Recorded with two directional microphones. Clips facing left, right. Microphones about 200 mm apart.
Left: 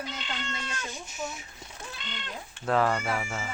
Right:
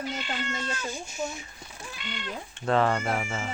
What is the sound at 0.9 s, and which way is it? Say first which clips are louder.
Speech: right 3 dB; centre (ahead or behind).